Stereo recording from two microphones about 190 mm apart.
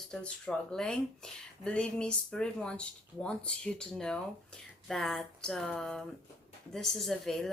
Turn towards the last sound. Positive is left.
turn(degrees=0)  # may be behind; listen again after turning